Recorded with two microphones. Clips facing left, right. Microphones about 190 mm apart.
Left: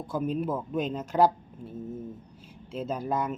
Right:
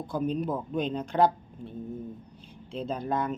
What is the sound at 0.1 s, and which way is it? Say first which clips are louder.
Speech: even; 5° left (ahead or behind).